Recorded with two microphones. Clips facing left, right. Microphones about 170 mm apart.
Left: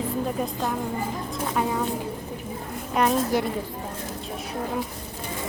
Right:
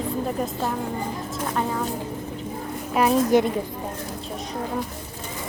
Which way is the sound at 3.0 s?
5° right (ahead or behind).